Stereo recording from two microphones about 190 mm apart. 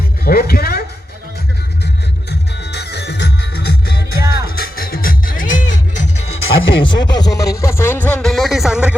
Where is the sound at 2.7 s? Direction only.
60° left (ahead or behind); by 5.6 s 45° left (ahead or behind).